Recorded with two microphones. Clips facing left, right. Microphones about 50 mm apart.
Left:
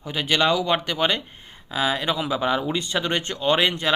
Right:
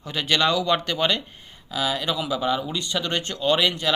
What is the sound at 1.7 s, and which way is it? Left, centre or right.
Speech, left.